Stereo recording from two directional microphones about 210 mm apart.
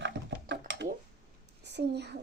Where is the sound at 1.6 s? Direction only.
55° right (ahead or behind).